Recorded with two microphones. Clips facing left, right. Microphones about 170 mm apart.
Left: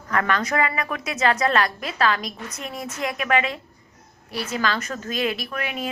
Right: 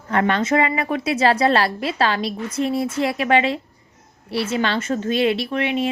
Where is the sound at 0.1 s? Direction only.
30° right (ahead or behind).